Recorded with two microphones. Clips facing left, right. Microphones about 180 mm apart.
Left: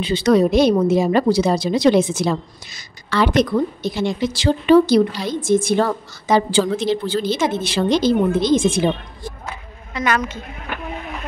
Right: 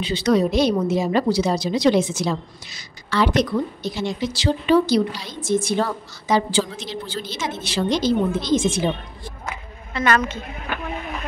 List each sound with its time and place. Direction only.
0.0 s a woman's voice: 55° left (ahead or behind)
9.9 s a woman's voice: 10° left (ahead or behind)